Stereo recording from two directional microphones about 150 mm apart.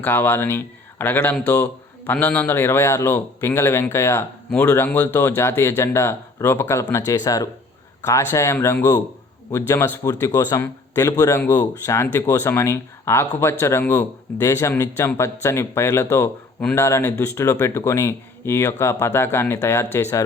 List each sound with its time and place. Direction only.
0.0 s a man's voice: 15° left (ahead or behind)